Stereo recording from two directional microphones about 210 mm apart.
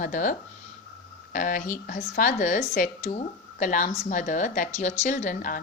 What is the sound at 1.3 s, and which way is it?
A woman's voice, 40° left (ahead or behind).